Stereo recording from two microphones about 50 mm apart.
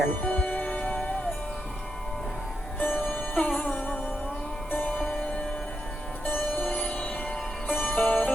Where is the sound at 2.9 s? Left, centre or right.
Left.